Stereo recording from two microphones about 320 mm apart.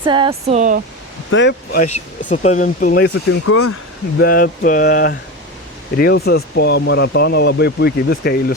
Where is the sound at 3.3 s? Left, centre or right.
Left.